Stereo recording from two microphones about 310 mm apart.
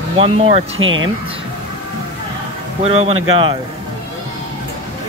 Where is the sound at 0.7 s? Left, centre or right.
Right.